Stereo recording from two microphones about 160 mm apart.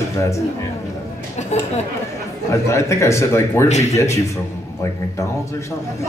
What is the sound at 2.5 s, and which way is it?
A man's voice, 20° left (ahead or behind).